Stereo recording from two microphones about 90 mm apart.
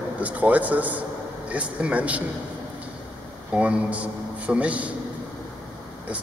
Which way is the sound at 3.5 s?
15° right (ahead or behind).